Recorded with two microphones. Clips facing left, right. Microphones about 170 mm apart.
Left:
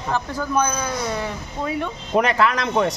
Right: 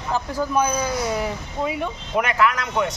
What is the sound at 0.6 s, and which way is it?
Speech, 10° right (ahead or behind).